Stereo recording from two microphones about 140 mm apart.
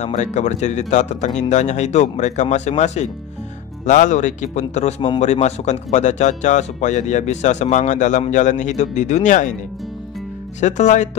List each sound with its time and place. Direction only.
0.0 s speech: 60° left (ahead or behind)
10.6 s speech: 55° left (ahead or behind)